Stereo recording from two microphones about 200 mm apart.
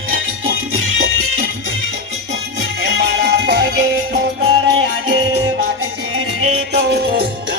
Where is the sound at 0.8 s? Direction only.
80° right.